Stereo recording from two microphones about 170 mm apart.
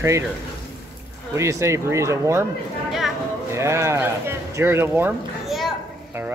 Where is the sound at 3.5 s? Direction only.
15° right (ahead or behind).